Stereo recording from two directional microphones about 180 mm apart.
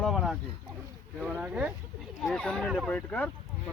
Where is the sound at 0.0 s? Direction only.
Centre (ahead or behind).